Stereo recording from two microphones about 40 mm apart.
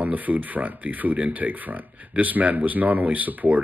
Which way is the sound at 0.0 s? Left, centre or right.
Right.